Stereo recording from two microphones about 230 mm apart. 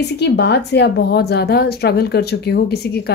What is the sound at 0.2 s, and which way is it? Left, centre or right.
Speech, left.